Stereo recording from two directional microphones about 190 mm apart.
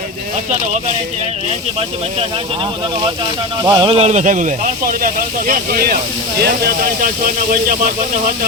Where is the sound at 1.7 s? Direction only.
30° right (ahead or behind); by 5.9 s 50° right (ahead or behind).